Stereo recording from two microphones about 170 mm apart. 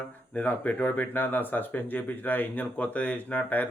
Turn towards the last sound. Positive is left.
turn(degrees=10)  # may be behind; listen again after turning